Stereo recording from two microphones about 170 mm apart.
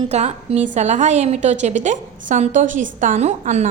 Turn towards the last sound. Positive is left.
turn(degrees=-40)  # may be behind; listen again after turning